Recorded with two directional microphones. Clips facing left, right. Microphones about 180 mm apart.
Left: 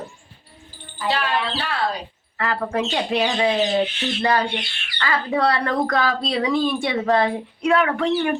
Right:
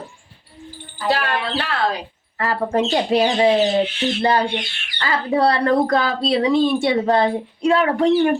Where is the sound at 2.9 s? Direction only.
35° right (ahead or behind).